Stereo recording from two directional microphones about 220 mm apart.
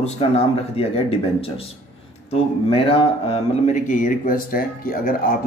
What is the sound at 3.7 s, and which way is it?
Speech, 35° left (ahead or behind).